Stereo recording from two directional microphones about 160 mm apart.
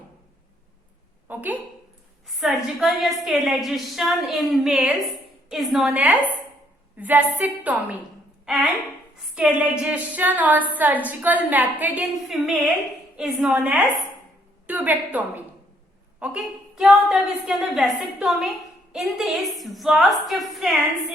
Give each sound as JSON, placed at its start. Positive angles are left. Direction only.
{"t": 1.3, "sound": "a sound", "side_deg": -10}
{"t": 2.2, "sound": "a woman's voice", "side_deg": 0}
{"t": 9.3, "sound": "a woman's voice", "side_deg": -5}
{"t": 16.2, "sound": "a woman's voice", "side_deg": -5}